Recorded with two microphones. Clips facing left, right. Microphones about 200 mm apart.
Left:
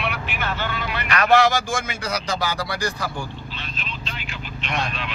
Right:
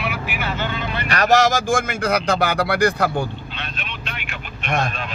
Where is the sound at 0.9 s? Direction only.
35° right (ahead or behind).